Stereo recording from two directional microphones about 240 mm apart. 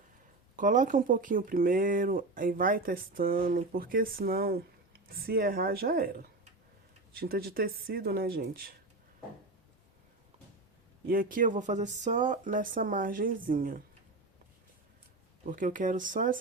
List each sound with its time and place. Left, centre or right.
0.5 s speech: right
11.1 s speech: right
15.4 s speech: right